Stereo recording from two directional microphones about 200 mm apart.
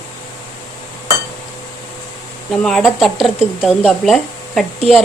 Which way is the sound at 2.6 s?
Centre (ahead or behind).